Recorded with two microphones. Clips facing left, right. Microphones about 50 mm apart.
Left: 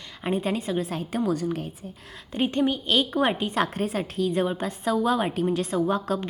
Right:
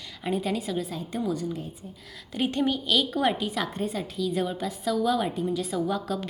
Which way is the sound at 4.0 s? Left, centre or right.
Left.